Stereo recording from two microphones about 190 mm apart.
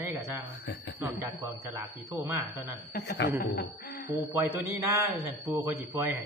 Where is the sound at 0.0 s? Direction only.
15° right (ahead or behind).